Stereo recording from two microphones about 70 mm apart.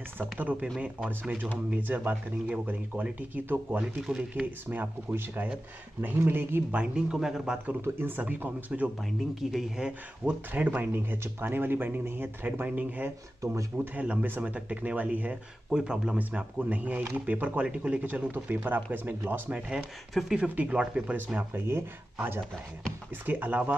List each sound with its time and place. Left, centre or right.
0.2 s speech: right
1.7 s speech: right
3.8 s speech: centre
4.2 s speech: right
6.7 s speech: centre
7.9 s speech: right
8.2 s speech: right
9.4 s speech: centre
9.8 s speech: right
15.7 s speech: centre
16.2 s speech: right
21.5 s speech: right
23.2 s speech: right